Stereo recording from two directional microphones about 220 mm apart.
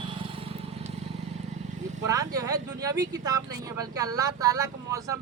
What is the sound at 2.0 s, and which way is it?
Speech, 15° right (ahead or behind).